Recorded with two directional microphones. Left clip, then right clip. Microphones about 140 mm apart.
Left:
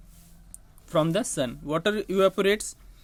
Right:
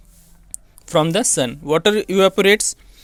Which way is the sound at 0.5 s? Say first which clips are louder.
Right 8 dB; 40° right (ahead or behind).